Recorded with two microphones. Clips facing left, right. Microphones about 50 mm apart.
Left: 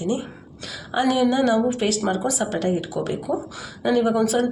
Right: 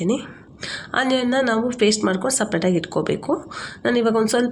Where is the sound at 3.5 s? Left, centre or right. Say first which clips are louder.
Right 1 dB; right.